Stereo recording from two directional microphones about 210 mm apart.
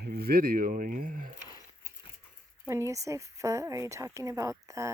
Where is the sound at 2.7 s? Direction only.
15° right (ahead or behind).